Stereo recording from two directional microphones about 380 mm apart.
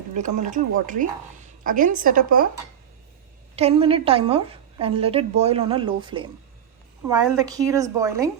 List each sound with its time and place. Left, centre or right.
0.1 s speech: centre
3.5 s a woman's voice: centre